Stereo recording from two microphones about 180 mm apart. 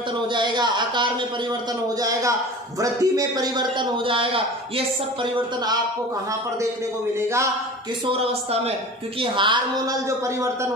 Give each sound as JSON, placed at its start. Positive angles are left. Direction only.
{"t": 0.3, "sound": "a man's voice", "side_deg": -25}
{"t": 7.2, "sound": "speech", "side_deg": -15}
{"t": 8.3, "sound": "a woman's voice", "side_deg": -35}